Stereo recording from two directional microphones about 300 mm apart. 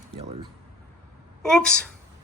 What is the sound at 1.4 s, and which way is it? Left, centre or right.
Speech, centre.